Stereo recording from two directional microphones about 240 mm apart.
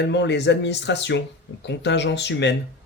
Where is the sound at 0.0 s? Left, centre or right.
Left.